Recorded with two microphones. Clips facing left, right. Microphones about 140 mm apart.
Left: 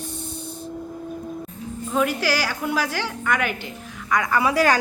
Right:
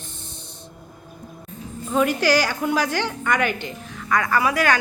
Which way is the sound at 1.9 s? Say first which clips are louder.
Right 3 dB; centre (ahead or behind).